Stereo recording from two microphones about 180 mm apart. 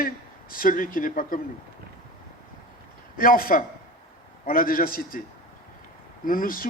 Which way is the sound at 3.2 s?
50° left (ahead or behind).